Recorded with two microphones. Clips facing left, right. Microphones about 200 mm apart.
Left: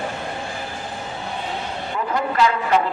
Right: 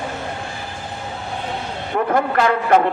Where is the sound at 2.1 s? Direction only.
55° right (ahead or behind).